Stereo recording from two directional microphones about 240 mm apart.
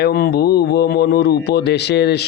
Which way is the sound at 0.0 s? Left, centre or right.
Left.